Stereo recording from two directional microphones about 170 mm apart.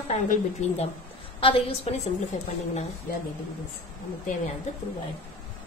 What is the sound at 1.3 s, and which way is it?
Speech, 35° left (ahead or behind).